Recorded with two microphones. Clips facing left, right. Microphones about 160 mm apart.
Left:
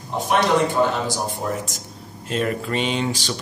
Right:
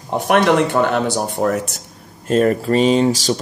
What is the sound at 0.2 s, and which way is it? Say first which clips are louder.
Speech: right 4 dB; 65° right (ahead or behind).